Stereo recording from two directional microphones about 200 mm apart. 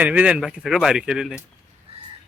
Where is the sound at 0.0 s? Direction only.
5° right (ahead or behind).